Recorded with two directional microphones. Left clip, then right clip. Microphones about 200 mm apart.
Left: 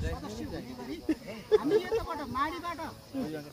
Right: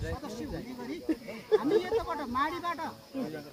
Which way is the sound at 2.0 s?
15° right (ahead or behind).